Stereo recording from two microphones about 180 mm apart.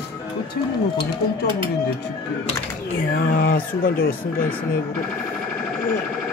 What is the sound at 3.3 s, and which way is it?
Speech, 55° left (ahead or behind).